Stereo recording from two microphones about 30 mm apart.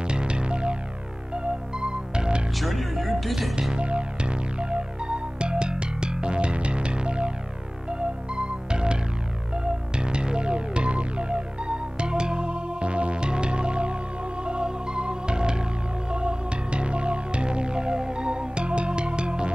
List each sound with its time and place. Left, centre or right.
0.0 s music: right
2.5 s speech: centre
3.7 s music: right